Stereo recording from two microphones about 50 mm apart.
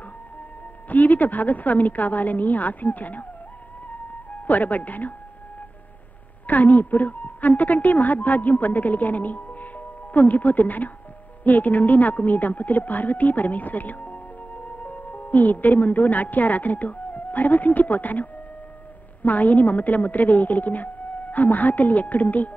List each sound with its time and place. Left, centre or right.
0.8 s a woman's voice: left
4.5 s a woman's voice: left
6.4 s a woman's voice: left